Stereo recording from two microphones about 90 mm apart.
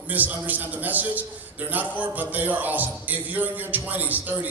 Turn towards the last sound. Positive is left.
turn(degrees=-20)  # may be behind; listen again after turning